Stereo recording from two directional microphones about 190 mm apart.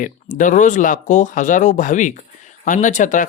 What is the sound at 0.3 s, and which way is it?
Speech, 40° left (ahead or behind).